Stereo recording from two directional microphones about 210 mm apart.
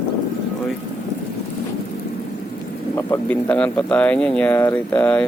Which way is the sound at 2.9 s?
10° left (ahead or behind).